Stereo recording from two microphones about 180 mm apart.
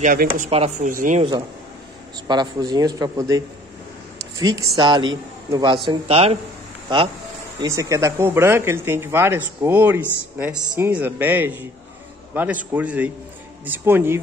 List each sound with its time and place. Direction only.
0.0 s speech: 50° right (ahead or behind)
2.2 s a man's voice: 25° right (ahead or behind)
7.6 s speech: 20° right (ahead or behind)